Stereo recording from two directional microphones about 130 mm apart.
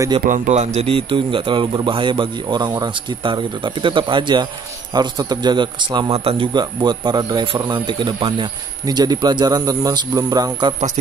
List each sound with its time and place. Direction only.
0.2 s a man's voice: 75° right (ahead or behind); by 10.7 s 30° right (ahead or behind)